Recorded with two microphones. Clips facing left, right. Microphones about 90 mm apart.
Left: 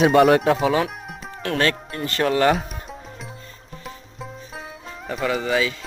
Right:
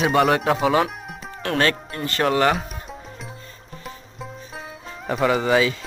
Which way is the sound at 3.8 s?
Centre (ahead or behind).